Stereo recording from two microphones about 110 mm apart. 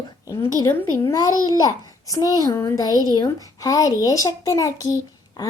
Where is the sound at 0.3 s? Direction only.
25° left (ahead or behind).